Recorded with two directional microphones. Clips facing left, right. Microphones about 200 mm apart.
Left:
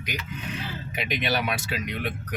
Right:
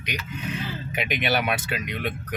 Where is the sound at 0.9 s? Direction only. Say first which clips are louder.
Right 2 dB; 55° right (ahead or behind).